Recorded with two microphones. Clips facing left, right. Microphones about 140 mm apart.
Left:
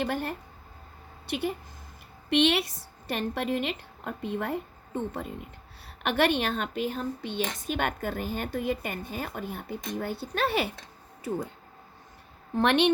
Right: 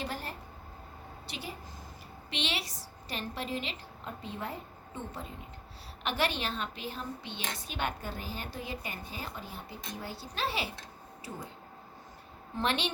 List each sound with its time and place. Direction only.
0.0 s a woman's voice: 60° left (ahead or behind)
12.5 s a woman's voice: 60° left (ahead or behind)